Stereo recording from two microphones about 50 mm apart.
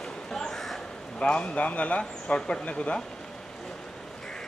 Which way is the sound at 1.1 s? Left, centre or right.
Left.